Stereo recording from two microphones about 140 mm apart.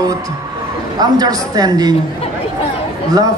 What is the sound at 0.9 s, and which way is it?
Speech, 25° right (ahead or behind).